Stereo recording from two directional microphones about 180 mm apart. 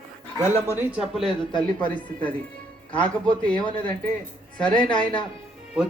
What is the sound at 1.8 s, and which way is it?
Music, 10° left (ahead or behind).